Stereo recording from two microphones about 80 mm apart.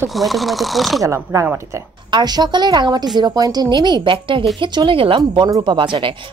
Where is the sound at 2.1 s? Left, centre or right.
Right.